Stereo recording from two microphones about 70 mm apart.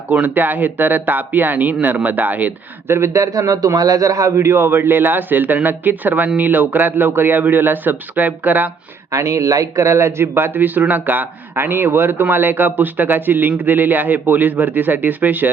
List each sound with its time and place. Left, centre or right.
0.1 s speech: right
2.9 s a man's voice: right
9.1 s speech: right